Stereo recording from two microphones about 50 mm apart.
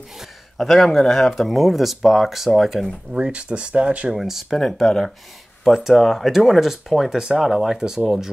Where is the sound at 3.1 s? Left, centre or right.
Right.